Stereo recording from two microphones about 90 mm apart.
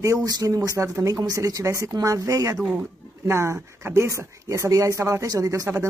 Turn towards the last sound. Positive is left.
turn(degrees=-40)  # may be behind; listen again after turning